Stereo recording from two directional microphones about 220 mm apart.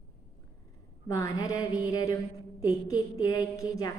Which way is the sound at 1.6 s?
5° right (ahead or behind).